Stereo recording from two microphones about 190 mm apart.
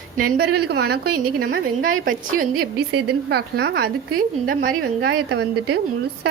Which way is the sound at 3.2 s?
60° right (ahead or behind).